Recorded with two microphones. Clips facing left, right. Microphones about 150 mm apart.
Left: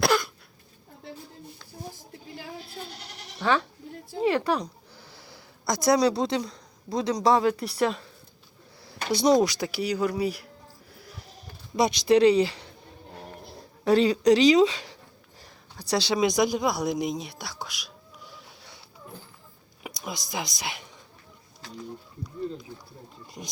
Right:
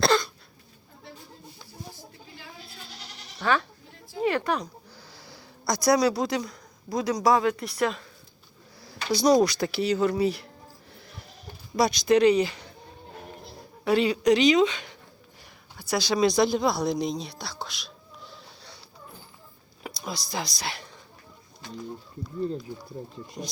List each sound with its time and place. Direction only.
0.0 s cough: 10° left (ahead or behind)
4.2 s speech: 30° left (ahead or behind)
7.7 s speech: centre (ahead or behind)
9.1 s speech: 25° left (ahead or behind); by 10.5 s 10° left (ahead or behind)
11.8 s speech: 25° left (ahead or behind)
13.8 s a woman's voice: 40° left (ahead or behind); by 18.8 s 15° left (ahead or behind)
19.8 s speech: 20° left (ahead or behind)